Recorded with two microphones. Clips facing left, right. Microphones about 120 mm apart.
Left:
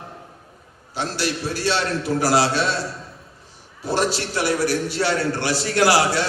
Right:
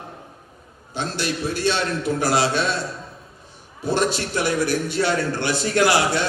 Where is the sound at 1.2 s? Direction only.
30° left (ahead or behind).